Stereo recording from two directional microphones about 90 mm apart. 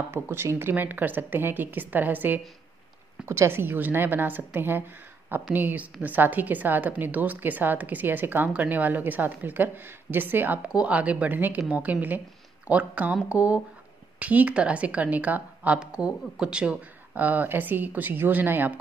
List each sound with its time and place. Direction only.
0.1 s a woman's voice: 25° right (ahead or behind)